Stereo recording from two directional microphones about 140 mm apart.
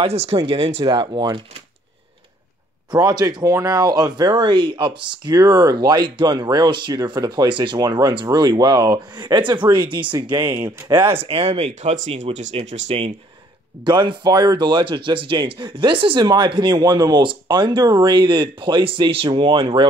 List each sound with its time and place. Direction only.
0.0 s speech: 45° right (ahead or behind)
2.9 s speech: 30° right (ahead or behind); by 12.9 s 55° right (ahead or behind)
13.8 s speech: 35° right (ahead or behind)